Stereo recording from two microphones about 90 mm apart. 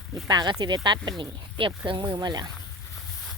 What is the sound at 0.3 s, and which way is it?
Speech, 55° right (ahead or behind).